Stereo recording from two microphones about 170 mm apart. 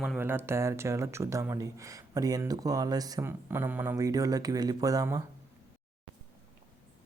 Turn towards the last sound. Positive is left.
turn(degrees=-20)  # may be behind; listen again after turning